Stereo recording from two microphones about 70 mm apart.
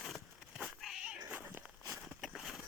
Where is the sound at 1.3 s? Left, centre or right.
Right.